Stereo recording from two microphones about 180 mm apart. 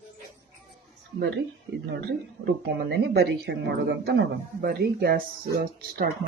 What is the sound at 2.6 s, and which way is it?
Speech, 65° right (ahead or behind).